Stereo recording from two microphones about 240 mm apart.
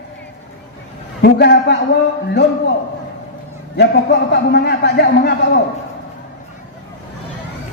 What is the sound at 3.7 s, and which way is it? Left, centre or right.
A man's voice, left.